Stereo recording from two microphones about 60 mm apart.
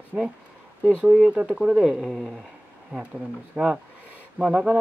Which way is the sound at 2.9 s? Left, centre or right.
Centre.